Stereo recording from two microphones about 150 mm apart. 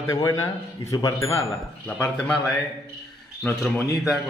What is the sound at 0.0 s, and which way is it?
A man's voice, 20° left (ahead or behind).